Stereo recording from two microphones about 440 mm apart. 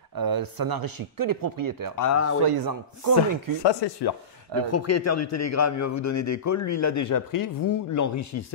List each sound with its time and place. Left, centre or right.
0.1 s speech: right
2.0 s a man's voice: left
2.4 s speech: right
3.6 s speech: left
4.6 s a man's voice: left